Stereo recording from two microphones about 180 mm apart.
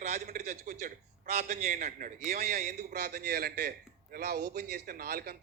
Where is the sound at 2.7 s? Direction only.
65° right (ahead or behind).